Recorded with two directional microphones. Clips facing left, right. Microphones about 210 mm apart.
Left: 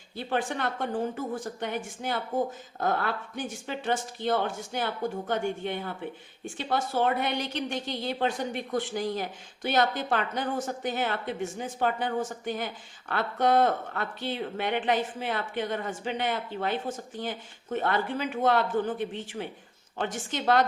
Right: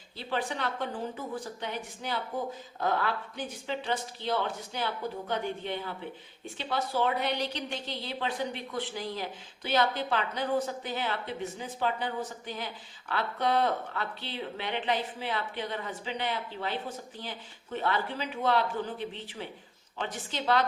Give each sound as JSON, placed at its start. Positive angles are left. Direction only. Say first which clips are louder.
{"t": 0.2, "sound": "speech", "louder": "left 3 dB", "side_deg": 50}